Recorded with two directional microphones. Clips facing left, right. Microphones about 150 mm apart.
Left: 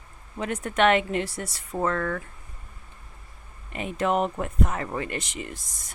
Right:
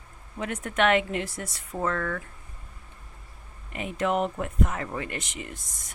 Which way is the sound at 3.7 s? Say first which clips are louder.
Left 2 dB; 35° left (ahead or behind).